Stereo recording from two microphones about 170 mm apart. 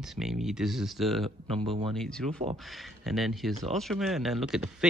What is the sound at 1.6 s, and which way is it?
Speech, 30° right (ahead or behind).